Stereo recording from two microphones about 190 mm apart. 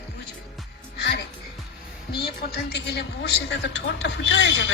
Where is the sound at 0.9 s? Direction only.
60° left (ahead or behind).